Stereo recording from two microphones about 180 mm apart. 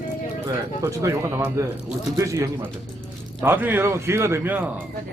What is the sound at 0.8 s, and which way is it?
A man's voice, 15° right (ahead or behind).